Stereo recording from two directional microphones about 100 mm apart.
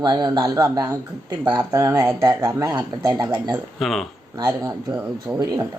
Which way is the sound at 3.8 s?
Centre (ahead or behind).